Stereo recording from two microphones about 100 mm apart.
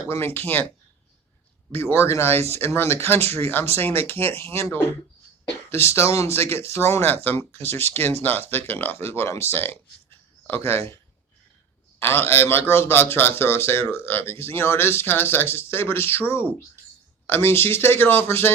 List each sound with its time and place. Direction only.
0.1 s a man's voice: 20° left (ahead or behind)
1.7 s a man's voice: 25° left (ahead or behind)
11.9 s a man's voice: 25° left (ahead or behind)